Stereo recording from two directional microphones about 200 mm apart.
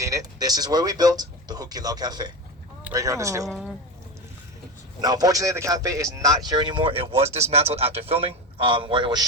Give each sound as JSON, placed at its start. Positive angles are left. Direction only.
{"t": 0.0, "sound": "speech", "side_deg": -15}
{"t": 4.9, "sound": "speech", "side_deg": -20}